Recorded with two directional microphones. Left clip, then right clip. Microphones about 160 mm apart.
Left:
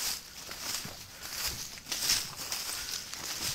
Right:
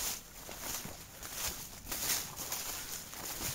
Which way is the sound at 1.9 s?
Centre (ahead or behind).